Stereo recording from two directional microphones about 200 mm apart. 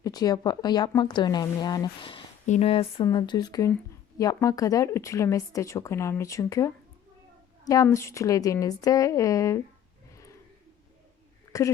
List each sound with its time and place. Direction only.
0.0 s speech: 20° left (ahead or behind)
11.5 s speech: 15° left (ahead or behind)